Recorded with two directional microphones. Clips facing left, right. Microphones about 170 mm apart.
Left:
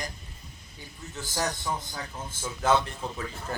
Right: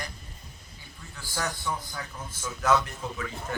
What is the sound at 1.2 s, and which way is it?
A man's voice, 20° left (ahead or behind).